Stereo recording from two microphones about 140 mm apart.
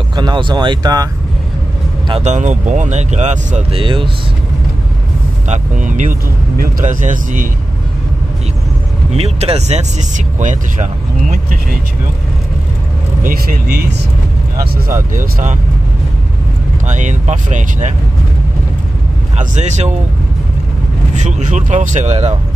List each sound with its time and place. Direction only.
0.1 s speech: 30° right (ahead or behind)
2.2 s speech: 60° right (ahead or behind)
3.7 s speech: 35° right (ahead or behind)
5.5 s speech: 65° right (ahead or behind)
9.1 s speech: 45° right (ahead or behind)
13.2 s speech: 90° right
14.6 s speech: 75° right (ahead or behind)
16.8 s speech: 60° right (ahead or behind)
19.3 s speech: 55° right (ahead or behind)
21.1 s speech: 60° right (ahead or behind)